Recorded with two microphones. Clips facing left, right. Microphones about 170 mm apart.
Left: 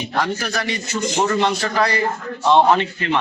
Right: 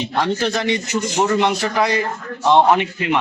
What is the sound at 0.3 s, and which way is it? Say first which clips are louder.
A man's voice: right 5 dB; 25° right (ahead or behind).